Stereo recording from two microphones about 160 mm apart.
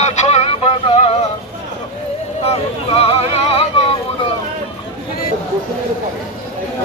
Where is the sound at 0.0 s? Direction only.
45° left (ahead or behind).